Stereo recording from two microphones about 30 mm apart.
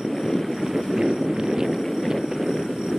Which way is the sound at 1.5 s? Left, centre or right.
Centre.